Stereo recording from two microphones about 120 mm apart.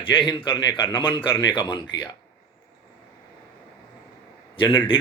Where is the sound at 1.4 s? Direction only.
40° left (ahead or behind).